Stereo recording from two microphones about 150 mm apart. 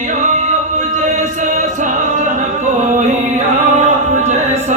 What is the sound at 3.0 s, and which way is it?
Chant, 50° right (ahead or behind).